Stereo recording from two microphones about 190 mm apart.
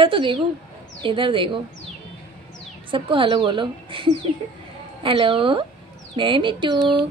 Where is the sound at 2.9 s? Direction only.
25° right (ahead or behind).